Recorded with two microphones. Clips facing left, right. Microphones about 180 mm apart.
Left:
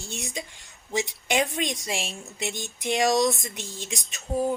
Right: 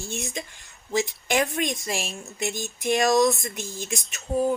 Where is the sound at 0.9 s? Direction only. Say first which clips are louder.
Right 2 dB; 15° left (ahead or behind).